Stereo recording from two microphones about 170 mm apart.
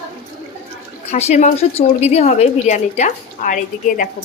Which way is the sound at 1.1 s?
40° left (ahead or behind).